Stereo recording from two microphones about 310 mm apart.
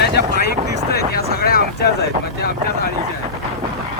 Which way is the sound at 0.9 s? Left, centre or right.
Left.